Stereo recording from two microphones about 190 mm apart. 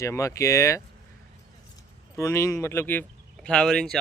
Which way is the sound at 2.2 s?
15° left (ahead or behind).